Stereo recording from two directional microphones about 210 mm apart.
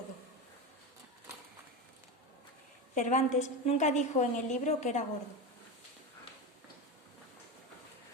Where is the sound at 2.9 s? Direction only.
35° left (ahead or behind).